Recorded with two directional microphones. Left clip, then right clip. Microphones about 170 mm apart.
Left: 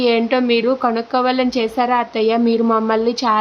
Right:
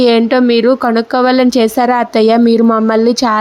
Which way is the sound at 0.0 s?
35° right (ahead or behind).